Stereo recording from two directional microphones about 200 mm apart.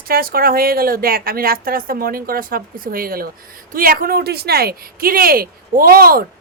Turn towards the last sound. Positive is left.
turn(degrees=-45)  # may be behind; listen again after turning